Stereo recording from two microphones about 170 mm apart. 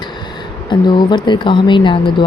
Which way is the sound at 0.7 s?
25° left (ahead or behind).